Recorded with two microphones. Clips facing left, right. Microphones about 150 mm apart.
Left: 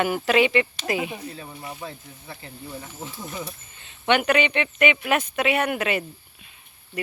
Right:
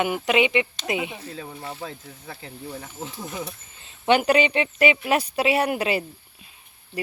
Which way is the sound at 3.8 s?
35° right (ahead or behind).